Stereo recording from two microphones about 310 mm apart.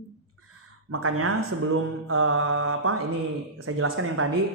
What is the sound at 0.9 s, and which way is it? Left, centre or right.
Speech, right.